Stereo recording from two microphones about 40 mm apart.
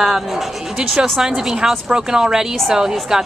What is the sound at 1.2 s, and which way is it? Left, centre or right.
Speech, centre.